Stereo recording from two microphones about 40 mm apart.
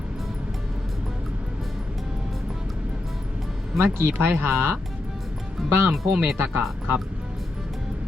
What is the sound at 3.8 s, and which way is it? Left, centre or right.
Speech, right.